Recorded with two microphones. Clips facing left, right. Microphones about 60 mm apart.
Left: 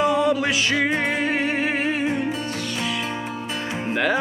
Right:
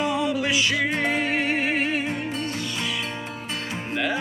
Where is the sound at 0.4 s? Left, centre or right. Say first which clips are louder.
Left 1 dB; left.